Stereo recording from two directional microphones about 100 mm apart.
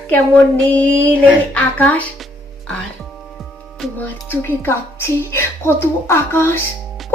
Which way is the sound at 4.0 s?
20° left (ahead or behind).